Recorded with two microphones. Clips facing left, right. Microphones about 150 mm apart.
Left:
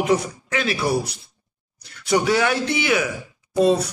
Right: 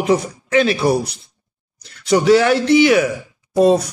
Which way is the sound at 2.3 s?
75° right (ahead or behind).